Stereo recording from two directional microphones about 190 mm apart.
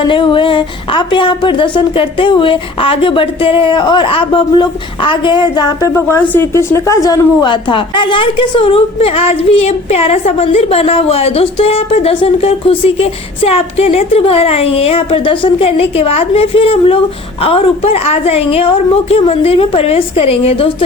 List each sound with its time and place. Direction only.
0.1 s a woman's voice: 25° left (ahead or behind)